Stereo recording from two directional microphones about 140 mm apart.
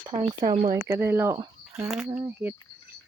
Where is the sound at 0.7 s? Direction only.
20° right (ahead or behind).